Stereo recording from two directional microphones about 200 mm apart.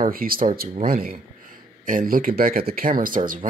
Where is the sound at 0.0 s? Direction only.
45° right (ahead or behind).